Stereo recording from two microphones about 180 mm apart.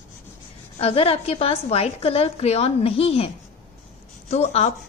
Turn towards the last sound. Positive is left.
turn(degrees=35)  # may be behind; listen again after turning